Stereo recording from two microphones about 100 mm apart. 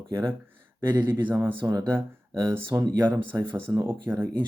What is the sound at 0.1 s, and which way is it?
Speech, 30° right (ahead or behind).